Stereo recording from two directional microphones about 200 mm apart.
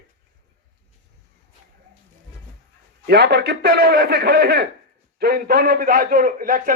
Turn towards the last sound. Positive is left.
turn(degrees=-45)  # may be behind; listen again after turning